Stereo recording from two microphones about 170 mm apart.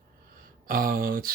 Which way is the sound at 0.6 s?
55° right (ahead or behind).